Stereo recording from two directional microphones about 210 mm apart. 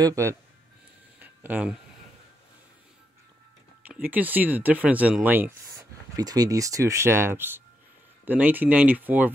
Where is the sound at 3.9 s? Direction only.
5° right (ahead or behind).